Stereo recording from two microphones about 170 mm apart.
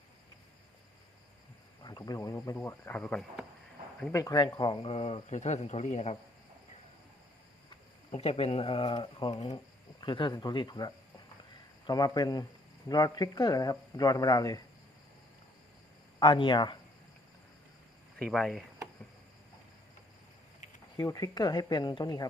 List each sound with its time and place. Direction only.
1.8 s speech: 25° left (ahead or behind); by 3.4 s 5° left (ahead or behind)
4.1 s speech: 20° left (ahead or behind); by 6.1 s 40° left (ahead or behind)
8.1 s speech: 35° left (ahead or behind)
16.2 s speech: 25° left (ahead or behind)
18.2 s speech: centre (ahead or behind)
20.9 s speech: 20° left (ahead or behind)